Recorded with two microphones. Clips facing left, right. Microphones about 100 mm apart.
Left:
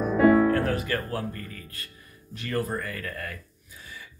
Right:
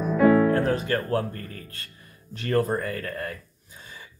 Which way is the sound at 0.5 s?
25° right (ahead or behind).